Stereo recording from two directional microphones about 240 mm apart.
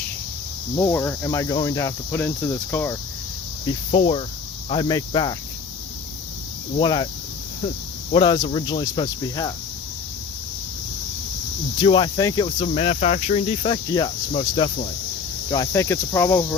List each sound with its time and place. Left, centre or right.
0.8 s speech: centre
3.7 s cricket: left
4.7 s speech: centre
6.7 s cricket: centre
8.1 s cricket: centre
11.8 s cricket: left
15.4 s speech: centre